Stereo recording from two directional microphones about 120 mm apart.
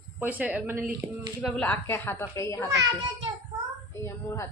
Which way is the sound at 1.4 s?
5° left (ahead or behind).